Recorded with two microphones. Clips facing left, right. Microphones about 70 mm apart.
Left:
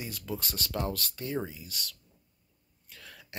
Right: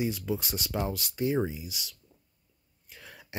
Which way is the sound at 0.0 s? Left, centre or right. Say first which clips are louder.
Right 7 dB; centre.